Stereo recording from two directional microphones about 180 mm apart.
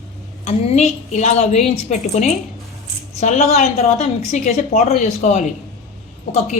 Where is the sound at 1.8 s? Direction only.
40° left (ahead or behind).